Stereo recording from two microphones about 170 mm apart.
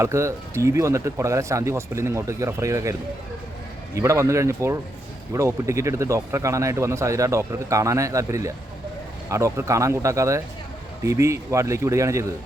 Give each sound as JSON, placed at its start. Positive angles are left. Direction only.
{"t": 0.0, "sound": "a man's voice", "side_deg": -15}
{"t": 3.9, "sound": "a man's voice", "side_deg": -15}